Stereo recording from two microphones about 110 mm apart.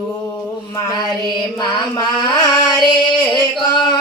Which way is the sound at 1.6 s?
40° left (ahead or behind).